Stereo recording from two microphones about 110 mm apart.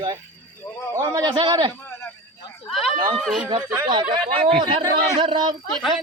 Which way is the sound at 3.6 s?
15° right (ahead or behind).